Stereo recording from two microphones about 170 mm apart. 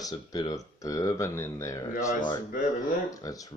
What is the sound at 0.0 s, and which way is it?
Speech, 20° left (ahead or behind).